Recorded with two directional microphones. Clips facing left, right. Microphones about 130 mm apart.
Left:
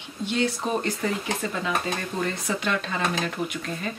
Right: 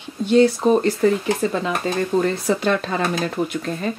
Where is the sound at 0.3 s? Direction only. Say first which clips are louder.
Right 11 dB; 35° right (ahead or behind).